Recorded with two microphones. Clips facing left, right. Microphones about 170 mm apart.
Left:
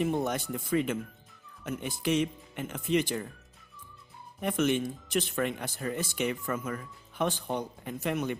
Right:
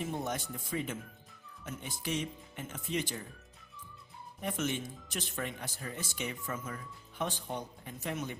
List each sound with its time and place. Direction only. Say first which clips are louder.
0.0 s speech: left 7 dB; 75° left (ahead or behind)
4.4 s speech: left 8 dB; 70° left (ahead or behind)